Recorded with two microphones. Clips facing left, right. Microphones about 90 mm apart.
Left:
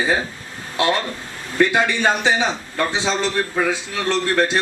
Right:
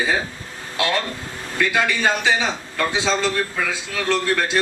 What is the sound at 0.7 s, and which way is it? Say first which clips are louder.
A man's voice: left 3 dB; 25° left (ahead or behind).